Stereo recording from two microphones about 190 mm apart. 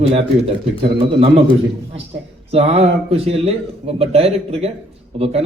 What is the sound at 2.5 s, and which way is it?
Speech, 35° right (ahead or behind).